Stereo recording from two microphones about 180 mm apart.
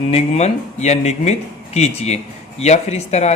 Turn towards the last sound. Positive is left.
turn(degrees=35)  # may be behind; listen again after turning